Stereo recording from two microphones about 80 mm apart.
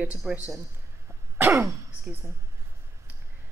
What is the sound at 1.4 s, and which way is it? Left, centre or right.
Speech, right.